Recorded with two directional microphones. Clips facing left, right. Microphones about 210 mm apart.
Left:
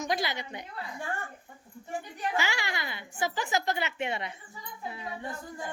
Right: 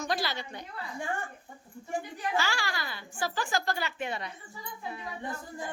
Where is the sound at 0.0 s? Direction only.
20° left (ahead or behind).